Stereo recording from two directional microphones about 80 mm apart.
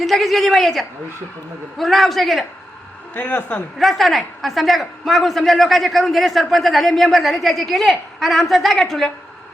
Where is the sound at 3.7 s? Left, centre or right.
Centre.